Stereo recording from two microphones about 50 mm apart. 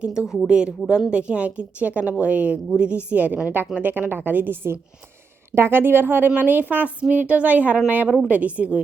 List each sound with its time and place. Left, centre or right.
0.0 s a woman's voice: centre; by 4.7 s right
5.5 s a woman's voice: right